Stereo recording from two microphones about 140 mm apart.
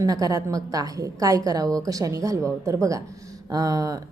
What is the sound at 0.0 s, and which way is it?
A woman's voice, 25° right (ahead or behind).